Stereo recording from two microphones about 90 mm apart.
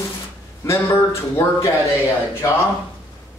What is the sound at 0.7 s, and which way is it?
A man's voice, 35° left (ahead or behind).